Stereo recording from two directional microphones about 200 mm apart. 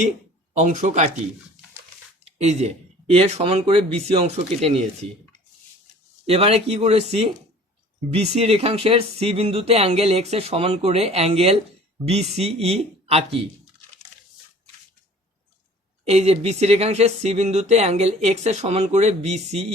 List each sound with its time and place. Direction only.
0.8 s speech: 35° right (ahead or behind)
2.4 s speech: 35° right (ahead or behind)
6.2 s speech: 30° right (ahead or behind)
16.0 s speech: 30° right (ahead or behind)